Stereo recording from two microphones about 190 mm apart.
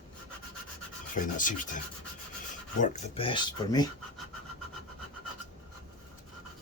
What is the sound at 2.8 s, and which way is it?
Speech, 35° left (ahead or behind).